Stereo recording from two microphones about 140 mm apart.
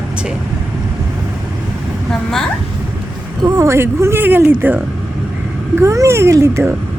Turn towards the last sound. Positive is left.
turn(degrees=-20)  # may be behind; listen again after turning